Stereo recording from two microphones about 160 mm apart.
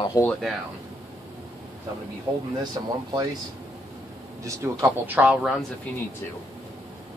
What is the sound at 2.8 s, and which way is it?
Speech, 30° right (ahead or behind).